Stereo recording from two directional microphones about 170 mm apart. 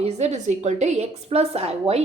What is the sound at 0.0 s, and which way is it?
A woman's voice, 40° right (ahead or behind).